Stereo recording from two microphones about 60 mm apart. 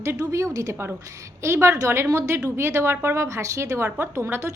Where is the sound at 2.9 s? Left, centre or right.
Right.